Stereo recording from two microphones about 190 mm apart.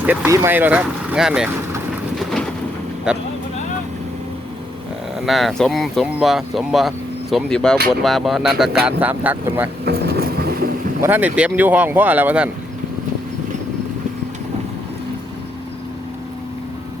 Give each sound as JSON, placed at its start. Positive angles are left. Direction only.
{"t": 0.0, "sound": "speech", "side_deg": -10}
{"t": 2.1, "sound": "rain", "side_deg": 5}
{"t": 3.1, "sound": "speech", "side_deg": -5}
{"t": 5.2, "sound": "speech", "side_deg": 0}
{"t": 9.8, "sound": "vehicle", "side_deg": -55}
{"t": 11.0, "sound": "speech", "side_deg": -10}